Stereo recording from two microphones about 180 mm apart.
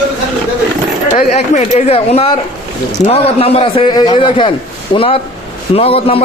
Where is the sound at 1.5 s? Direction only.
35° left (ahead or behind).